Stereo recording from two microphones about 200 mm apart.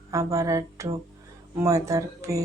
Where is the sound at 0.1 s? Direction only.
15° right (ahead or behind).